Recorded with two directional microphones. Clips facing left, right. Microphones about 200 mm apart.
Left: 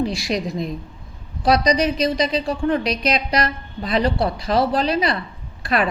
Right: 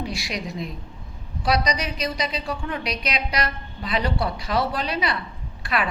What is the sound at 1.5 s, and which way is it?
A woman's voice, 40° left (ahead or behind).